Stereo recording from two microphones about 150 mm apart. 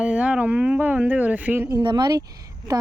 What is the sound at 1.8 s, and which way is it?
Speech, 30° right (ahead or behind).